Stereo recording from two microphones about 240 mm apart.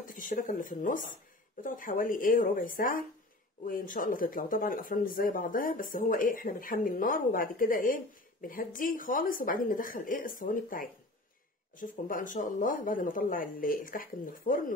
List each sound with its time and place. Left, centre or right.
0.0 s speech: left